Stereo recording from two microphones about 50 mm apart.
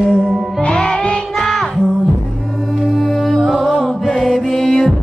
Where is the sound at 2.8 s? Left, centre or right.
Centre.